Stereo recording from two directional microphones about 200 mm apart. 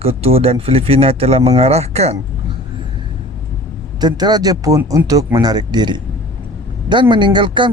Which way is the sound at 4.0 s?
20° right (ahead or behind).